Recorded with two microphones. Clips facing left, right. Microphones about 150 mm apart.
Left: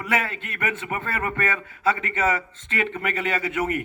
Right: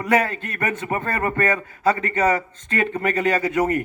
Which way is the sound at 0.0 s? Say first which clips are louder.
Right 6 dB; 45° right (ahead or behind).